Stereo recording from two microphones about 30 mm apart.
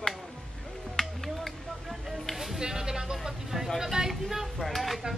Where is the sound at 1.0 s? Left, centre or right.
Centre.